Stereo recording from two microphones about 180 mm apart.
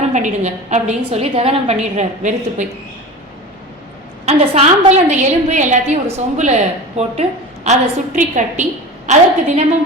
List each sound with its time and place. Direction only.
0.1 s a woman's voice: 40° right (ahead or behind)
4.3 s a woman's voice: 35° right (ahead or behind)